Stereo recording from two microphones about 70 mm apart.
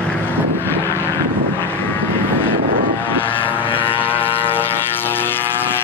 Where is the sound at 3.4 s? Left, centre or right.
Left.